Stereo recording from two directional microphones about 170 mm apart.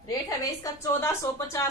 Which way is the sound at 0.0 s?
20° left (ahead or behind).